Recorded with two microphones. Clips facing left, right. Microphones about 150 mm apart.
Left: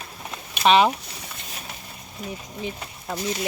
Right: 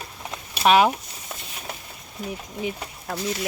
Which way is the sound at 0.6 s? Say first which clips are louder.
Even; 5° right (ahead or behind).